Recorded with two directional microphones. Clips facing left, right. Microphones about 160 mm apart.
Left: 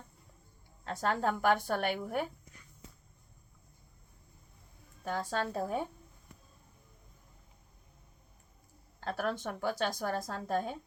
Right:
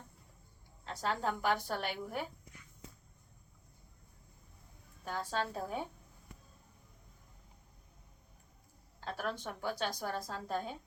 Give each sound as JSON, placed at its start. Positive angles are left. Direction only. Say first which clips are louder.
{"t": 0.9, "sound": "a woman's voice", "louder": "left 4 dB", "side_deg": 55}
{"t": 5.0, "sound": "a woman's voice", "louder": "left 3 dB", "side_deg": 50}
{"t": 9.0, "sound": "a woman's voice", "louder": "left 5 dB", "side_deg": 50}